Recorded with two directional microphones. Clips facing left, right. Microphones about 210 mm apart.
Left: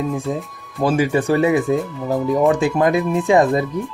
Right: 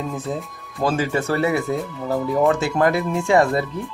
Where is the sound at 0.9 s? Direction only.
15° left (ahead or behind).